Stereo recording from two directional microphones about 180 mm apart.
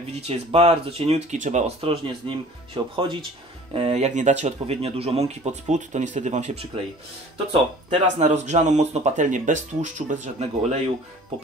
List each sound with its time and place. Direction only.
0.1 s speech: 35° right (ahead or behind)